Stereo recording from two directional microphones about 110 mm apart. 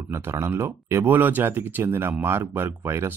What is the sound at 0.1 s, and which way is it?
A man's voice, 25° right (ahead or behind).